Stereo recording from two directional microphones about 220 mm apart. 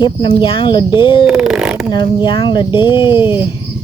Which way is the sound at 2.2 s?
20° left (ahead or behind).